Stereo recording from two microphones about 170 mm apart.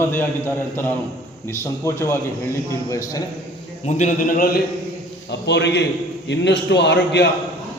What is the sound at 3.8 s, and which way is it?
Speech, 45° left (ahead or behind).